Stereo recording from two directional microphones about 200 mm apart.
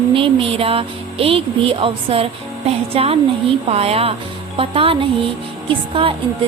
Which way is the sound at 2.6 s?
30° right (ahead or behind).